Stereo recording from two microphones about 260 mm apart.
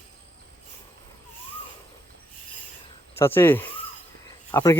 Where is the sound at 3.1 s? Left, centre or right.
Centre.